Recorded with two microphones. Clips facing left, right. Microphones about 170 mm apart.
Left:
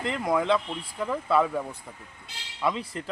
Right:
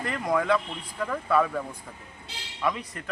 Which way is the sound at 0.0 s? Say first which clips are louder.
Left 1 dB; 20° left (ahead or behind).